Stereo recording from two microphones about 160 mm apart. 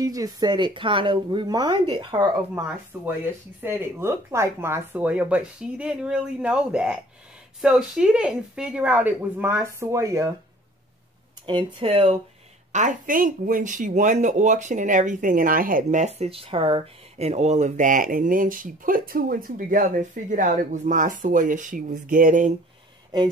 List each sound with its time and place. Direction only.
0.0 s a woman's voice: 20° right (ahead or behind)
2.5 s a woman's voice: 15° right (ahead or behind)
11.4 s speech: 35° right (ahead or behind)
12.7 s speech: 55° right (ahead or behind)